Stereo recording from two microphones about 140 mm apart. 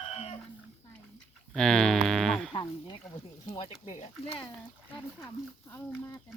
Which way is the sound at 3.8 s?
50° left (ahead or behind).